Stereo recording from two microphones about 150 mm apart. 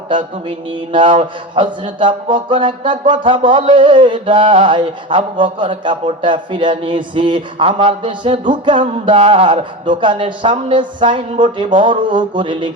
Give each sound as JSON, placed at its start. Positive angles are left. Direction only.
{"t": 0.1, "sound": "a man's voice", "side_deg": -30}